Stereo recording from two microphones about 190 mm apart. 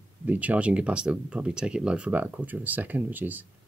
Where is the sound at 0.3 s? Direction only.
10° right (ahead or behind).